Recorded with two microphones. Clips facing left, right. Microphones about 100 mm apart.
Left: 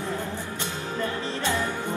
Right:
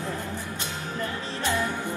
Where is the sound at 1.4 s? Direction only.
20° left (ahead or behind).